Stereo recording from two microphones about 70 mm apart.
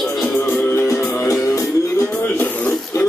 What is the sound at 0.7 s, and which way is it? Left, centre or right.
Music, left.